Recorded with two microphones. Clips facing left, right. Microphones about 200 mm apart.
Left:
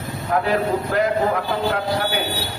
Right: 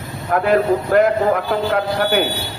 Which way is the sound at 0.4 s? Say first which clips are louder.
Right 5 dB; 55° right (ahead or behind).